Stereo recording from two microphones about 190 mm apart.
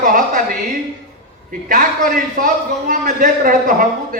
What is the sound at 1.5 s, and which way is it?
A man's voice, 45° right (ahead or behind).